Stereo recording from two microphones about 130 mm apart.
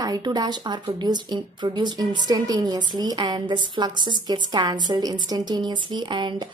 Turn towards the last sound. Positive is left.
turn(degrees=-35)  # may be behind; listen again after turning